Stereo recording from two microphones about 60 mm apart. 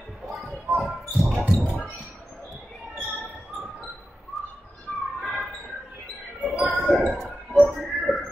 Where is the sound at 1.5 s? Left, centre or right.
Centre.